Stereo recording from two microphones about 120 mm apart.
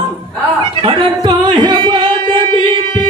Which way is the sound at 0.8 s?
40° right (ahead or behind).